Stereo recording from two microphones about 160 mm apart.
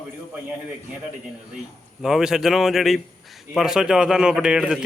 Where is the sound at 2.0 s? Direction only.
5° right (ahead or behind).